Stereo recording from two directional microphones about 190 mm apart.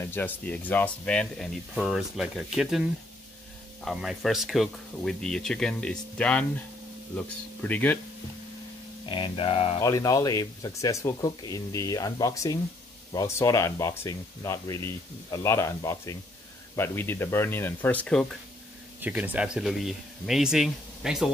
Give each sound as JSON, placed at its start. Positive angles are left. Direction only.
{"t": 0.0, "sound": "speech", "side_deg": 10}
{"t": 3.8, "sound": "speech", "side_deg": 0}
{"t": 9.1, "sound": "speech", "side_deg": 25}
{"t": 9.8, "sound": "speech", "side_deg": 15}
{"t": 18.9, "sound": "speech", "side_deg": -10}